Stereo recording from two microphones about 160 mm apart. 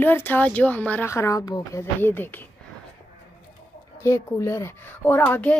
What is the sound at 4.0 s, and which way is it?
Speech, 20° left (ahead or behind).